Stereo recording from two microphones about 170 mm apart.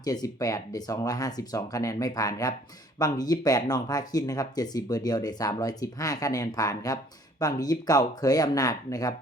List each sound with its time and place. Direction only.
0.0 s speech: 20° left (ahead or behind)